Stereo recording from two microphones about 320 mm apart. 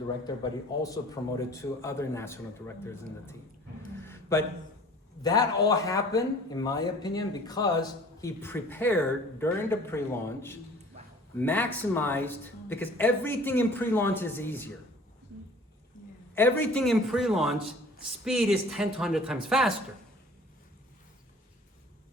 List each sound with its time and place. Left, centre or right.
0.3 s speech: centre
4.0 s a sound: centre
5.2 s speech: centre
16.3 s speech: centre